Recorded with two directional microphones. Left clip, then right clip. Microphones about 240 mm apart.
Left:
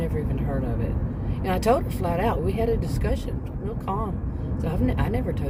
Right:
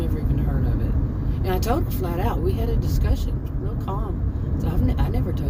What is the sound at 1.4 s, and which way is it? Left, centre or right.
Speech, centre.